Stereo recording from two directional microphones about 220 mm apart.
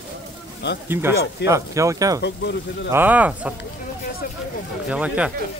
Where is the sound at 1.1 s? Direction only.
50° left (ahead or behind).